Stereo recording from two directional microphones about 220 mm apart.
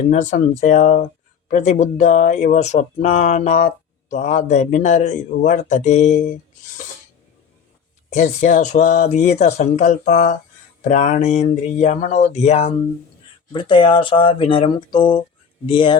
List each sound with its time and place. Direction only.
0.1 s speech: 35° left (ahead or behind)
8.1 s speech: 35° left (ahead or behind)